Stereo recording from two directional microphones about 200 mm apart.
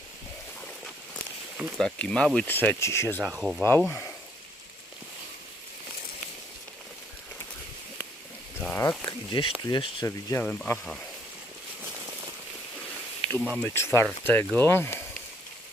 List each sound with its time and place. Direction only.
1.8 s speech: 5° left (ahead or behind)
3.2 s speech: centre (ahead or behind)
3.6 s speech: 10° left (ahead or behind)
8.5 s speech: 10° left (ahead or behind)
9.0 s a sound: 25° left (ahead or behind)
9.6 s speech: 20° left (ahead or behind); by 11.0 s 5° left (ahead or behind)
13.6 s speech: 15° left (ahead or behind)